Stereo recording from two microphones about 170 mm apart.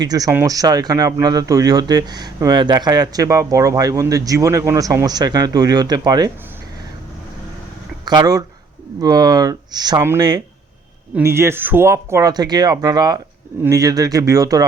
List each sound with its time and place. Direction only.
0.0 s speech: 20° right (ahead or behind)
8.0 s speech: 25° right (ahead or behind)